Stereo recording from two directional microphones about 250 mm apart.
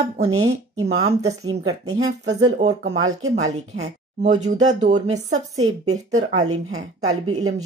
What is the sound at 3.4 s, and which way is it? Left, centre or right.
Speech, right.